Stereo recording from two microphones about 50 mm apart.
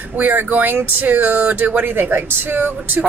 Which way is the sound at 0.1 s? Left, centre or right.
Right.